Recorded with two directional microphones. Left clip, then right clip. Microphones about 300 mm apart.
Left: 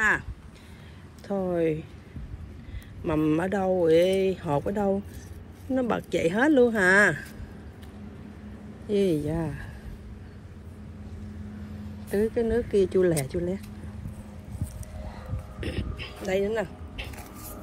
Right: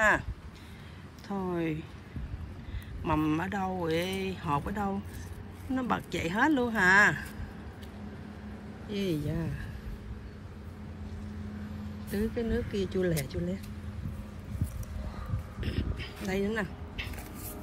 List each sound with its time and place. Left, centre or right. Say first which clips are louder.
1.2 s speech: left 8 dB; centre
3.1 s speech: left 5 dB; centre
8.9 s speech: left 9 dB; centre
12.1 s speech: left 8 dB; centre
15.6 s a sound: left 4 dB; centre